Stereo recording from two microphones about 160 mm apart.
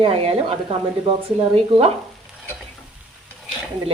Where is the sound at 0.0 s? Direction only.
40° right (ahead or behind).